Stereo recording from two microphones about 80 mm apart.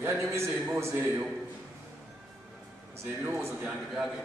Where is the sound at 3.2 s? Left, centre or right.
Right.